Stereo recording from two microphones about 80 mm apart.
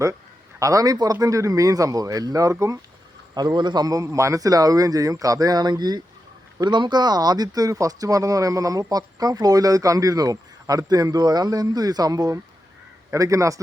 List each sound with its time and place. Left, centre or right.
0.6 s speech: right
3.3 s speech: right
6.7 s speech: right